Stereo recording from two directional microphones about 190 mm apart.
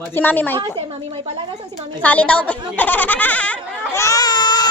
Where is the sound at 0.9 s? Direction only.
30° right (ahead or behind).